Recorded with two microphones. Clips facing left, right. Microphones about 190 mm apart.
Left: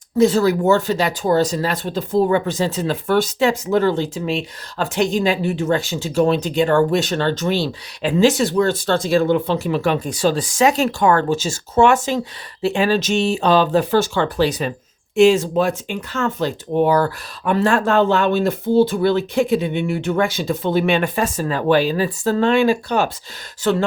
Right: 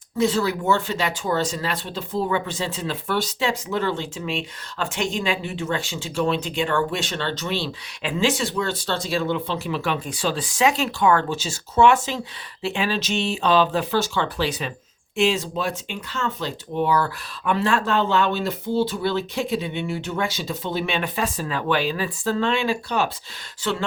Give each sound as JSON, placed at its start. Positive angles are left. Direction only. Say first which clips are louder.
{"t": 0.2, "sound": "speech", "louder": "left 7 dB", "side_deg": 40}